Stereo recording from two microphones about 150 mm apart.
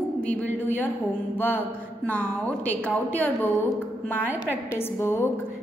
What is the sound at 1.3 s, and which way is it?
Mantra, 15° left (ahead or behind).